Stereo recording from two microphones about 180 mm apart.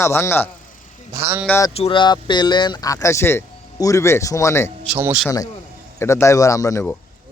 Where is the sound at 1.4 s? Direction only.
10° left (ahead or behind).